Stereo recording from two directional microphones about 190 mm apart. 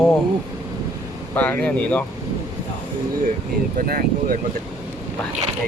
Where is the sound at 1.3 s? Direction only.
10° left (ahead or behind).